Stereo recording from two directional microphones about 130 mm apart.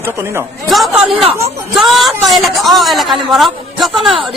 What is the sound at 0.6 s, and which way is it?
A woman's voice, centre (ahead or behind).